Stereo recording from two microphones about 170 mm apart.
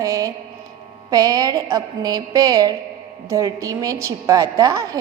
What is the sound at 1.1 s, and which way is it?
A woman's voice, 20° right (ahead or behind).